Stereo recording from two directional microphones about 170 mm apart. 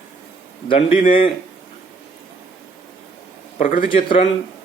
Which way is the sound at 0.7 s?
30° left (ahead or behind).